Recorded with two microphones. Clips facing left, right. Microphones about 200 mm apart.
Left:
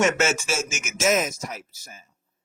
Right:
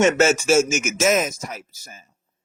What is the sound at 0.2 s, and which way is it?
Speech, 40° right (ahead or behind).